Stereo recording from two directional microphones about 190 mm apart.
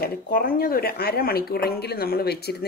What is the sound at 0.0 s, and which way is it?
Speech, 50° left (ahead or behind).